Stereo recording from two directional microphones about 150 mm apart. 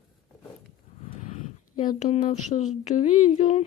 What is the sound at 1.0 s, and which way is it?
Speech, 50° left (ahead or behind).